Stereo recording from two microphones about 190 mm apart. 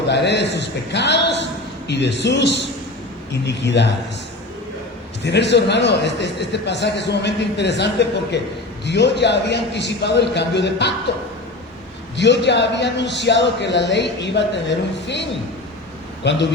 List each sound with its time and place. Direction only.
0.1 s a man's voice: 65° left (ahead or behind)
5.2 s a man's voice: 65° left (ahead or behind)
12.1 s a man's voice: 65° left (ahead or behind)